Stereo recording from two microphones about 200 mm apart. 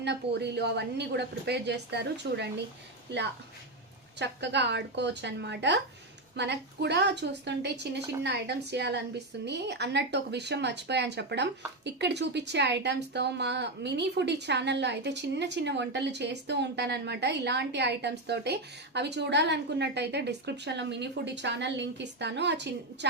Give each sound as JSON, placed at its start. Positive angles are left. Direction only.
{"t": 0.0, "sound": "speech", "side_deg": -55}
{"t": 4.2, "sound": "speech", "side_deg": -60}